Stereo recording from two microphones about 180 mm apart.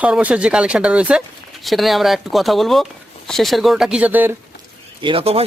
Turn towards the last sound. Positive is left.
turn(degrees=-30)  # may be behind; listen again after turning